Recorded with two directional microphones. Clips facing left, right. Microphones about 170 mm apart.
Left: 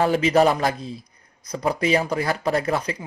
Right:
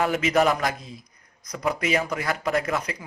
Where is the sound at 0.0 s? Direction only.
30° left (ahead or behind).